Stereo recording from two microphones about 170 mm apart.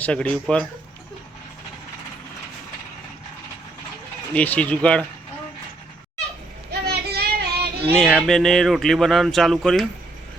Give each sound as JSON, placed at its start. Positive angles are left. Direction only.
{"t": 0.0, "sound": "speech", "side_deg": 5}
{"t": 4.4, "sound": "speech", "side_deg": 10}
{"t": 6.8, "sound": "child singing", "side_deg": -70}
{"t": 7.9, "sound": "speech", "side_deg": 0}